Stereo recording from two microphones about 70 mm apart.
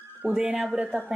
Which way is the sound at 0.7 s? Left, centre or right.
Right.